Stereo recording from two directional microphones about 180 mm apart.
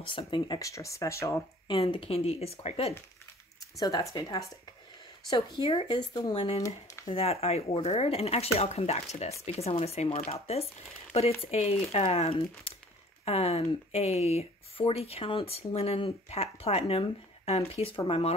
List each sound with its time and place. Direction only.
0.0 s speech: 30° left (ahead or behind)
1.8 s speech: 30° left (ahead or behind)
3.7 s speech: 20° left (ahead or behind)